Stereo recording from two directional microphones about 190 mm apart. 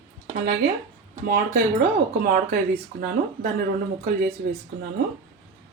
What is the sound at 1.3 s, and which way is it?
Speech, 50° right (ahead or behind).